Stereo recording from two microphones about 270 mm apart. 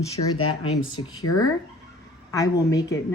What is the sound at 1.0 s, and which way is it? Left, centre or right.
Speech, left.